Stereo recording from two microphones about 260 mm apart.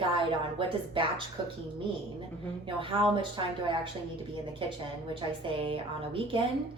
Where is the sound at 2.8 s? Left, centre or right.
Centre.